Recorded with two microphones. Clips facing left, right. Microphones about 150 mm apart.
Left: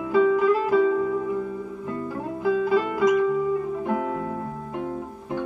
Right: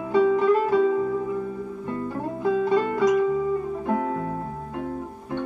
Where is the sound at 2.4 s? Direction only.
5° left (ahead or behind).